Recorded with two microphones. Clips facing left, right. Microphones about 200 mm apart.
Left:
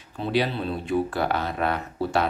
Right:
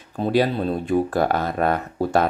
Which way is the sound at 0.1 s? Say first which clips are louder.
Right 5 dB; 45° right (ahead or behind).